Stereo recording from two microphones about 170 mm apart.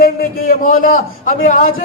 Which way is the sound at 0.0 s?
55° left (ahead or behind).